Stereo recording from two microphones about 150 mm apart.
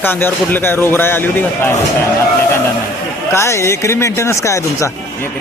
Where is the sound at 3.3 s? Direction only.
20° left (ahead or behind).